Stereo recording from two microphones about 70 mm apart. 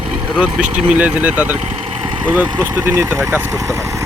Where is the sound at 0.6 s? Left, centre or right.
Right.